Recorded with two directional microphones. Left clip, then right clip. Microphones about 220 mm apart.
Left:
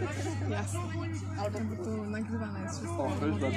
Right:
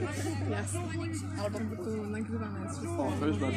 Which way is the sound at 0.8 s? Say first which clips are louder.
Right 1 dB; 50° right (ahead or behind).